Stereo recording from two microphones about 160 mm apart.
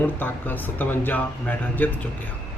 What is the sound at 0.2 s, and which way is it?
Speech, 10° left (ahead or behind).